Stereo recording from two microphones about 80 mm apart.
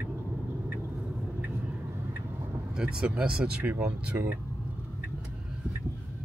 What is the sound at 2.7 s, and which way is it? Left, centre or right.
Speech, centre.